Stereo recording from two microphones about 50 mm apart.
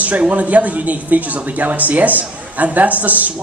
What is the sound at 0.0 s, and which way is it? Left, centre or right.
Speech, right.